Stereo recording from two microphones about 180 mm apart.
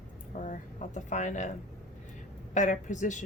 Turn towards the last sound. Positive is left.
turn(degrees=45)  # may be behind; listen again after turning